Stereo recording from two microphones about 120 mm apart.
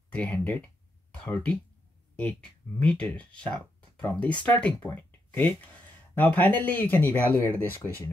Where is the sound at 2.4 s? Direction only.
10° left (ahead or behind).